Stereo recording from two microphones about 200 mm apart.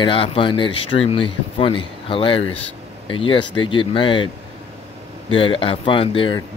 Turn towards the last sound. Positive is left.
turn(degrees=25)  # may be behind; listen again after turning